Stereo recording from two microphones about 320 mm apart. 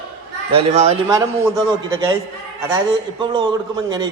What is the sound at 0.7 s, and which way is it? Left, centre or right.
Speech, right.